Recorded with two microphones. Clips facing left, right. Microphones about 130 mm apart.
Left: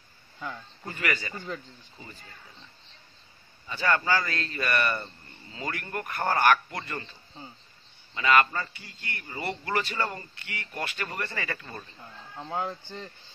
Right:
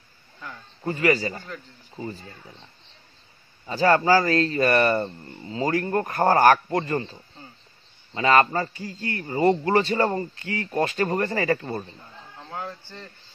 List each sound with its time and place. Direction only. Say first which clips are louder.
0.8 s a man's voice: right 10 dB; 35° right (ahead or behind)
3.6 s a man's voice: right 8 dB; 35° right (ahead or behind)
12.4 s speech: left 3 dB; 20° left (ahead or behind)